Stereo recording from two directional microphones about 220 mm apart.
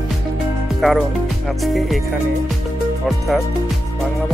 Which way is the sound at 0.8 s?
Centre (ahead or behind).